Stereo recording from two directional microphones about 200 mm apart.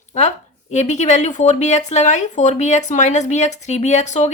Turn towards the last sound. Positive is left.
turn(degrees=35)  # may be behind; listen again after turning